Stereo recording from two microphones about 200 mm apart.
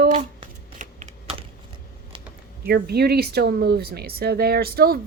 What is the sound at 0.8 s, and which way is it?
Computer keyboard, 35° right (ahead or behind).